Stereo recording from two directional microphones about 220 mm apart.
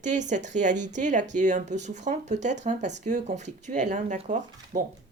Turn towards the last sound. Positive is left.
turn(degrees=-35)  # may be behind; listen again after turning